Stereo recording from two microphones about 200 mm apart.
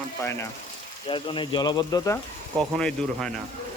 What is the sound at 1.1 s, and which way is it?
Speech, 25° left (ahead or behind).